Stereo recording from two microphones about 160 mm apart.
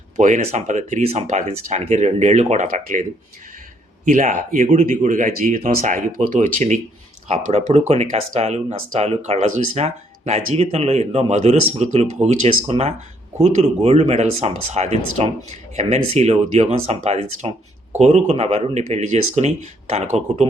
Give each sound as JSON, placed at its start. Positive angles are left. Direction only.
{"t": 0.2, "sound": "speech", "side_deg": -50}